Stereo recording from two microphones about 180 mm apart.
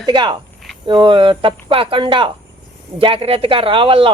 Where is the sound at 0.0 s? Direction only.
25° right (ahead or behind).